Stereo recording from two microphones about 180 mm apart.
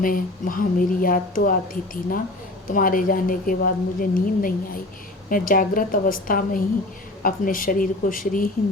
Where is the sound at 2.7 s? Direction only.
50° left (ahead or behind).